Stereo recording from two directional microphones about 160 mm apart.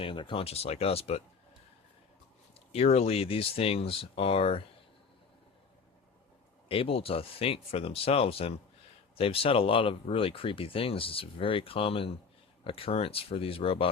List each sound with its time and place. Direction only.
0.0 s speech: 30° left (ahead or behind)
2.7 s speech: 40° left (ahead or behind)
6.7 s speech: 35° left (ahead or behind)